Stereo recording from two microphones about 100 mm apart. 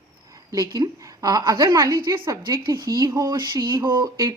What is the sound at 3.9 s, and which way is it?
Speech, 25° right (ahead or behind).